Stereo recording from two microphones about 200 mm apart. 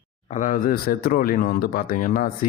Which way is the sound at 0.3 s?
40° left (ahead or behind).